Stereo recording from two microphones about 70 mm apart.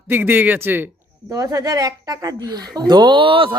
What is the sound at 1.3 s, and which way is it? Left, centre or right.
Speech, right.